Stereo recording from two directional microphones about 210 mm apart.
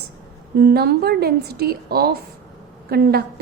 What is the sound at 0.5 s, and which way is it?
A woman's voice, 50° right (ahead or behind).